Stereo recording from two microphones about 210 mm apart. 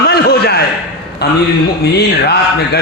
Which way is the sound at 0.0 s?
50° left (ahead or behind).